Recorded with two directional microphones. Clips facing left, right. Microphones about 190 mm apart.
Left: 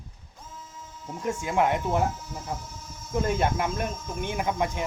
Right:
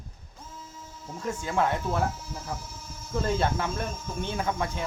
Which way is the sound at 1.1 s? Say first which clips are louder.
Left 3 dB; 15° left (ahead or behind).